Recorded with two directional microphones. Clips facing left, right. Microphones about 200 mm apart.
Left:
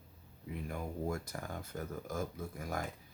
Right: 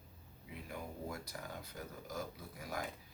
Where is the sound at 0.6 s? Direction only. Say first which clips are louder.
Left 6 dB; 50° left (ahead or behind).